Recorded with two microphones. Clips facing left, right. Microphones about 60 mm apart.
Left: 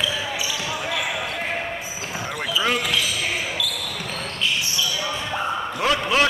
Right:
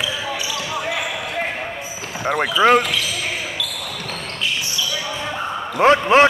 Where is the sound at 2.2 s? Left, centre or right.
Right.